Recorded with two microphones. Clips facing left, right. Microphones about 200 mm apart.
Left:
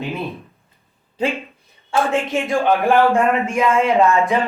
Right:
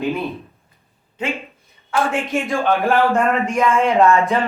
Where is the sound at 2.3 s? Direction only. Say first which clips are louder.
Left 1 dB; 15° left (ahead or behind).